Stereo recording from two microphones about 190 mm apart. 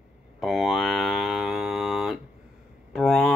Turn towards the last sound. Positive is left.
turn(degrees=5)  # may be behind; listen again after turning